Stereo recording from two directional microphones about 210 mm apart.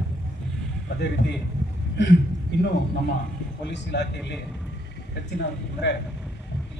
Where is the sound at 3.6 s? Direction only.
55° left (ahead or behind).